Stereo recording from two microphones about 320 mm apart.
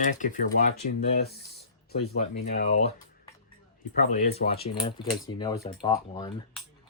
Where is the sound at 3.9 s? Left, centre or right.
Left.